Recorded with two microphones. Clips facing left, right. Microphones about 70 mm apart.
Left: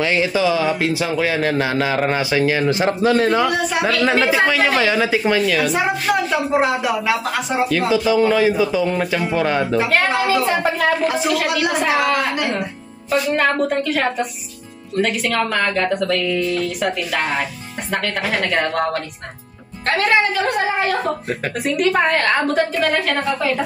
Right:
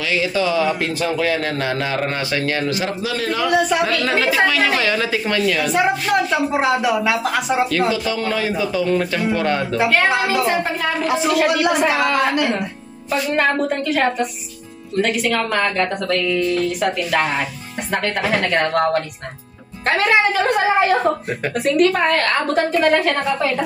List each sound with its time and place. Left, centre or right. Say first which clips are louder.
0.0 s a man's voice: left 3 dB; left
0.3 s a man's voice: left 1 dB; centre
3.0 s a man's voice: left 7 dB; left
4.5 s a man's voice: left 1 dB; centre
5.5 s speech: left 1 dB; centre
7.7 s a man's voice: left 3 dB; centre
13.1 s speech: left 1 dB; centre
21.7 s a man's voice: right 1 dB; centre